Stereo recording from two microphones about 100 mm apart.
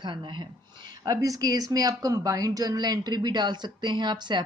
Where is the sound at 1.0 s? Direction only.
35° right (ahead or behind).